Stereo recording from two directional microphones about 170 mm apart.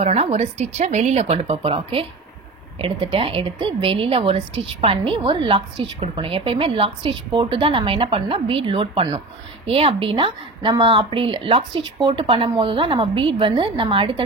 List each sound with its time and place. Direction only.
0.0 s a woman's voice: 40° right (ahead or behind)